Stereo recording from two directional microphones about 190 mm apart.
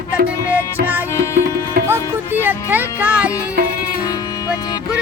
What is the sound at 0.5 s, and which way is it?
Music, 10° right (ahead or behind).